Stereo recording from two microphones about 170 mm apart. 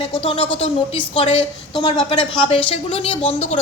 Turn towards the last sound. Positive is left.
turn(degrees=40)  # may be behind; listen again after turning